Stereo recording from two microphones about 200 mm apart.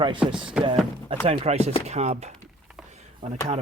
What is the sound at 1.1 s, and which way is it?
Speech, 30° right (ahead or behind).